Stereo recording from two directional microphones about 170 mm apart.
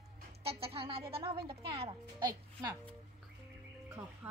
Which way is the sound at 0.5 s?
35° right (ahead or behind).